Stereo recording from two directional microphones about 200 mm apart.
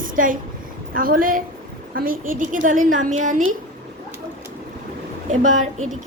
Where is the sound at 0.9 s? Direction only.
45° right (ahead or behind).